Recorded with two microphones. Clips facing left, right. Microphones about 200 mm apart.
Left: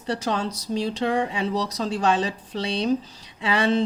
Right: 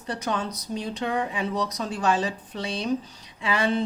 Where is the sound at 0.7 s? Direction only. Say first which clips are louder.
Left 5 dB; 30° left (ahead or behind).